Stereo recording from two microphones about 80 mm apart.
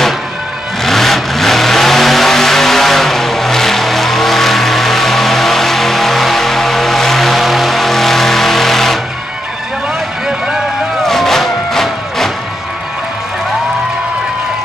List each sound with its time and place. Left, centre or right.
0.8 s vehicle: centre
10.2 s vehicle: centre